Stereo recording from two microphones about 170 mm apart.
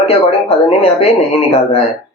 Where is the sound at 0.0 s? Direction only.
35° left (ahead or behind).